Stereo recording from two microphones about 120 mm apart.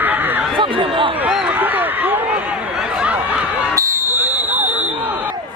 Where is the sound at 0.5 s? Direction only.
45° right (ahead or behind).